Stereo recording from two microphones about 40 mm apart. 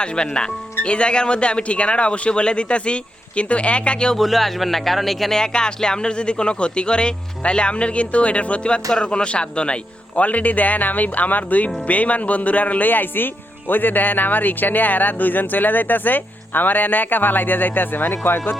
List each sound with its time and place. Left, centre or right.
0.0 s speech: left
4.2 s a man's voice: centre
5.4 s speech: centre; by 18.5 s left